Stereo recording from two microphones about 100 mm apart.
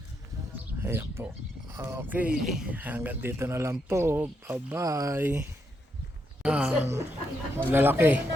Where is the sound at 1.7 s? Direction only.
25° right (ahead or behind).